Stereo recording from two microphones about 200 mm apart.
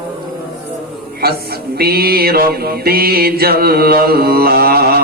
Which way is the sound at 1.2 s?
50° right (ahead or behind).